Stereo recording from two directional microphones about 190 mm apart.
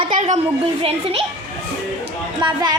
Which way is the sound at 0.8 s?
30° right (ahead or behind).